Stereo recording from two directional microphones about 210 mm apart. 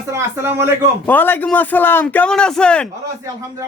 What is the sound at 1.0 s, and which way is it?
Speech, 10° left (ahead or behind).